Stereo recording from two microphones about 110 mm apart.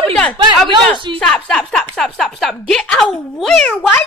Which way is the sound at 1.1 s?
5° left (ahead or behind).